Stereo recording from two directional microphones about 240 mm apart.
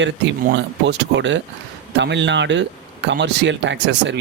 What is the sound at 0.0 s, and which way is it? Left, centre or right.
Speech, right.